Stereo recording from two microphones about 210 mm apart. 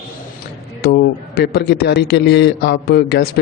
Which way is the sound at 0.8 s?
50° left (ahead or behind).